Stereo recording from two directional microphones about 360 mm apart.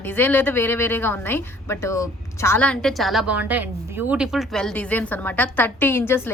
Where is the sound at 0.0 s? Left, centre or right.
Centre.